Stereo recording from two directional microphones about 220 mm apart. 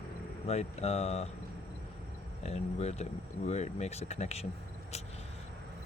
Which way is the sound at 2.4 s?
30° left (ahead or behind).